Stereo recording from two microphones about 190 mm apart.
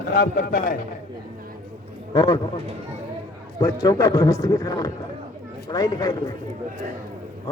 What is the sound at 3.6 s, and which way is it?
A man's voice, 20° left (ahead or behind).